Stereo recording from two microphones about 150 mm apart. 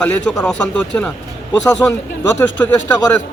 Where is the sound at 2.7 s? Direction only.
25° left (ahead or behind).